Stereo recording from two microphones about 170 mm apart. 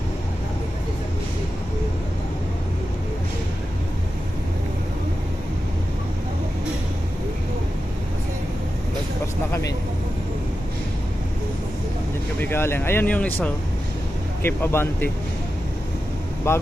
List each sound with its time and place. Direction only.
9.5 s vehicle: 20° left (ahead or behind)
12.4 s speech: 15° left (ahead or behind)
16.5 s speech: 15° left (ahead or behind)